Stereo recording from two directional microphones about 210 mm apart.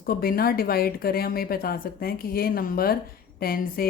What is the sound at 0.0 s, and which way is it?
Speech, 45° left (ahead or behind).